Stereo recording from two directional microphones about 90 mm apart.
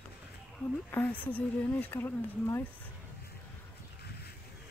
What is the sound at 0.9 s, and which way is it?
Speech, 20° left (ahead or behind).